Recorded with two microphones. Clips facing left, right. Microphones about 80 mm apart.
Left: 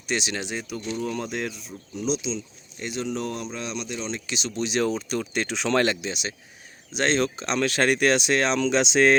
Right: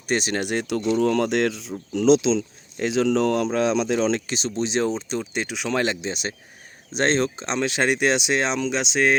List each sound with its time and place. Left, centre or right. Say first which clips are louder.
0.1 s speech: right 5 dB; right
4.3 s speech: right 3 dB; right; by 5.9 s centre
5.9 s speech: right 2 dB; right
8.6 s speech: left 2 dB; centre